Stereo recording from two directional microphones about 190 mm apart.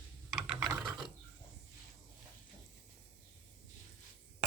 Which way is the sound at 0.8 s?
Centre (ahead or behind).